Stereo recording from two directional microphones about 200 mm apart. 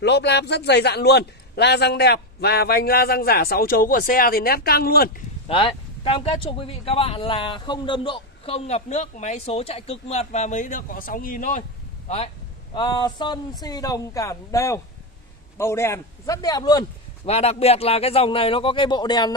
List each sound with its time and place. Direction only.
0.0 s a man's voice: 60° left (ahead or behind)
5.5 s speech: 25° left (ahead or behind)
12.7 s a man's voice: 20° left (ahead or behind)
17.3 s speech: 30° left (ahead or behind)